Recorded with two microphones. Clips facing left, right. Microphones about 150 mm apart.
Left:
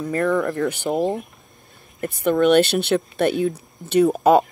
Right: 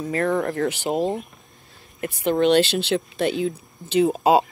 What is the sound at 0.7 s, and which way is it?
Speech, 50° left (ahead or behind).